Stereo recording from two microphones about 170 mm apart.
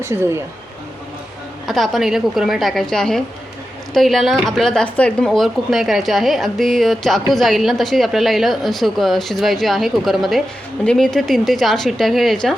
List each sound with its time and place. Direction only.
0.0 s speech: 15° right (ahead or behind)
1.6 s speech: centre (ahead or behind)